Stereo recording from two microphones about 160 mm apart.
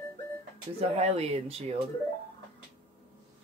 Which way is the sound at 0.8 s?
40° right (ahead or behind).